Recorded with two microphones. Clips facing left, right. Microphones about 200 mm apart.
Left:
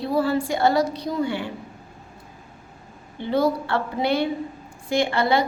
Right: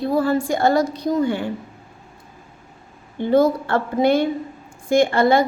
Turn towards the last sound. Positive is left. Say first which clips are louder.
# right 5 dB
turn(degrees=-45)  # may be behind; listen again after turning